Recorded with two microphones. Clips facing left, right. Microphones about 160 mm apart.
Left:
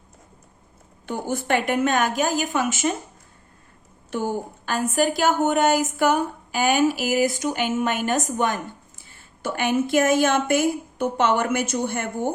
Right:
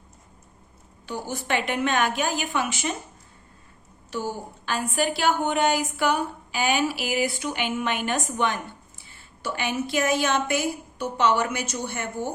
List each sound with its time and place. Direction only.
1.0 s a woman's voice: 55° left (ahead or behind)
4.1 s a woman's voice: 50° left (ahead or behind)